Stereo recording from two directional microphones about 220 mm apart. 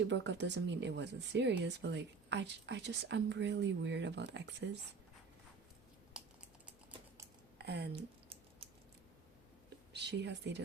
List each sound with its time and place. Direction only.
0.1 s speech: 50° right (ahead or behind)
7.6 s speech: 50° right (ahead or behind)
9.9 s speech: 50° right (ahead or behind)